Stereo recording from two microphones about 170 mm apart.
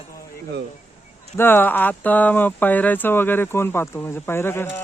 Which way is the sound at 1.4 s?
15° left (ahead or behind).